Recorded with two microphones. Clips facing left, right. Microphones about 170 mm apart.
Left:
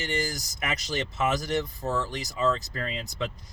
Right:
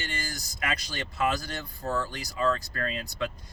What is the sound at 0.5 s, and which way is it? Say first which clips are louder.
Speech: left 2 dB; 25° left (ahead or behind).